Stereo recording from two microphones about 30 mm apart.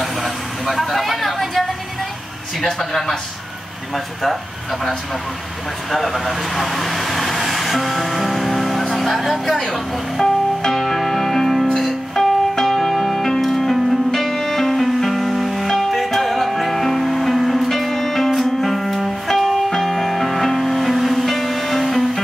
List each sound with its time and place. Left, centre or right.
0.0 s vehicle: centre
2.6 s a man's voice: centre
5.9 s speech: centre
7.4 s music: centre
8.9 s speech: centre
10.2 s music: left
10.7 s music: centre